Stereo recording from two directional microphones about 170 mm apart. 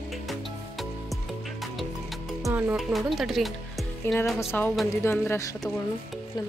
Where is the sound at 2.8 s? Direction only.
Centre (ahead or behind).